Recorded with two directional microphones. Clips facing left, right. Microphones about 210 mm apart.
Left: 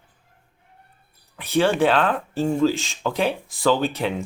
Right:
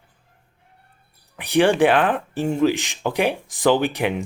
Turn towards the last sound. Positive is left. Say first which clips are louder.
# right 2 dB
turn(degrees=-15)  # may be behind; listen again after turning